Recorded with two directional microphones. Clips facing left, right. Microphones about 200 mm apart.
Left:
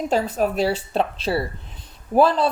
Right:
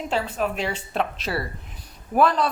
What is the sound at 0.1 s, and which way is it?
A woman's voice, 40° left (ahead or behind).